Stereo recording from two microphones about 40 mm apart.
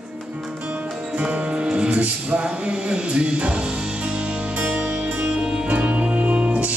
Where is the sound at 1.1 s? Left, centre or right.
Right.